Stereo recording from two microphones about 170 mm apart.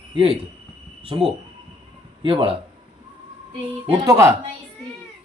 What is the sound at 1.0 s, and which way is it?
Speech, 30° right (ahead or behind).